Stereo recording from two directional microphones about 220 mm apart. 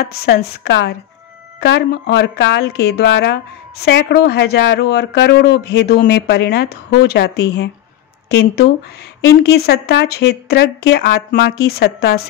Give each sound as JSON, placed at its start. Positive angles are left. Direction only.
{"t": 0.0, "sound": "speech", "side_deg": 45}